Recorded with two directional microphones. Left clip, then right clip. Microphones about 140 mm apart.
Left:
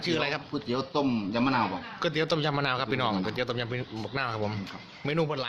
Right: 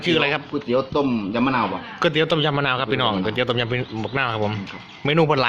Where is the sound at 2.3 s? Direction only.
5° left (ahead or behind).